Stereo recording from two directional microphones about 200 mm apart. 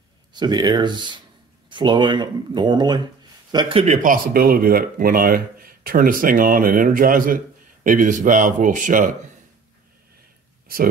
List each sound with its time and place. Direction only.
0.3 s speech: 20° right (ahead or behind); by 9.1 s 40° right (ahead or behind)